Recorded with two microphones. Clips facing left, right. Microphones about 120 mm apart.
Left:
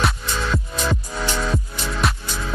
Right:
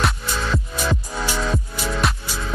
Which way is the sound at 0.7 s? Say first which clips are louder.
Even; centre (ahead or behind).